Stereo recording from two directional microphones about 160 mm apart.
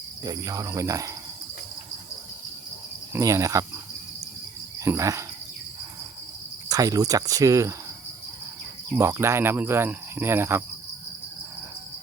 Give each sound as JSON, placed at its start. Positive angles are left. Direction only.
{"t": 0.3, "sound": "cricket", "side_deg": -20}
{"t": 3.1, "sound": "cricket", "side_deg": -20}
{"t": 4.8, "sound": "cricket", "side_deg": -20}
{"t": 6.7, "sound": "cricket", "side_deg": -20}
{"t": 9.0, "sound": "cricket", "side_deg": -15}